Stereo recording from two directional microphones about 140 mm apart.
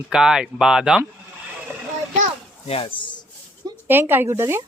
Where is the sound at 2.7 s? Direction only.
40° left (ahead or behind).